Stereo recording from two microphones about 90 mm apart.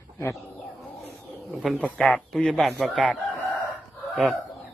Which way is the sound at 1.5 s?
5° right (ahead or behind).